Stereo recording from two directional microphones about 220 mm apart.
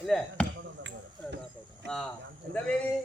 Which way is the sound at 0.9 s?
55° right (ahead or behind).